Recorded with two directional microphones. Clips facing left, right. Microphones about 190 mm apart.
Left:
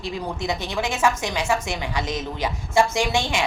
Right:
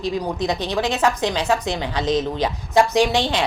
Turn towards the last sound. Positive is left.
turn(degrees=-20)  # may be behind; listen again after turning